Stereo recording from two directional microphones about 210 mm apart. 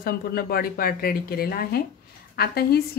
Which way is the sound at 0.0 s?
45° left (ahead or behind).